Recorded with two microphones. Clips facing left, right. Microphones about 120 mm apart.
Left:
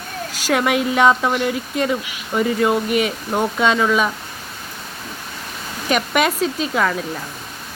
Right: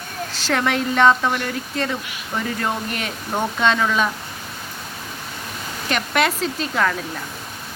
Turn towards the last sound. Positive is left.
turn(degrees=5)  # may be behind; listen again after turning